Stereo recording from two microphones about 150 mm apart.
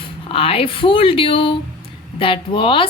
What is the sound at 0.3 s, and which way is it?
A woman's voice, 40° left (ahead or behind).